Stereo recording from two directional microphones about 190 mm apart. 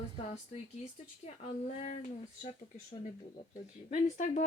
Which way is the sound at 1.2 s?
40° left (ahead or behind).